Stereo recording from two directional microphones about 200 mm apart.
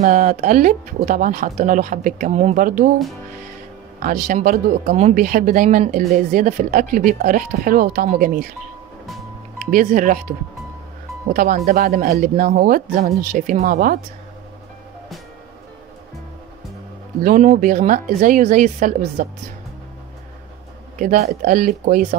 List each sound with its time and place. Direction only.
0.0 s speech: 40° right (ahead or behind)
4.0 s speech: 45° right (ahead or behind)
9.7 s speech: 40° right (ahead or behind)
17.2 s speech: 40° right (ahead or behind)
21.0 s speech: 45° right (ahead or behind)